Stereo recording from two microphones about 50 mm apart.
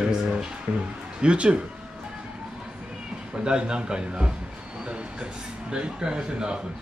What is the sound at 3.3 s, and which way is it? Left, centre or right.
A man's voice, centre.